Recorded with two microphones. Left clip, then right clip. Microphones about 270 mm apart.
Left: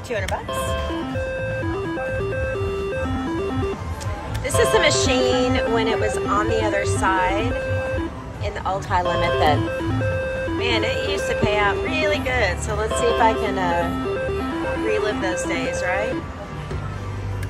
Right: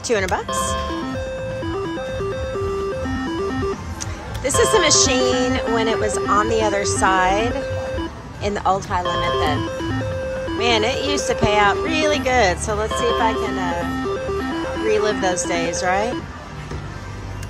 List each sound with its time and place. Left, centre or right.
0.5 s speech: centre
3.3 s music: centre
4.4 s speech: centre
10.6 s speech: centre